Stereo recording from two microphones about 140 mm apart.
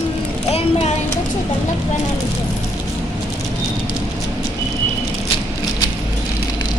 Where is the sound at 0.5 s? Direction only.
45° left (ahead or behind).